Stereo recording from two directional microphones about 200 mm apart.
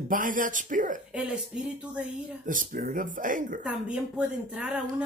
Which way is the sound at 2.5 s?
40° right (ahead or behind).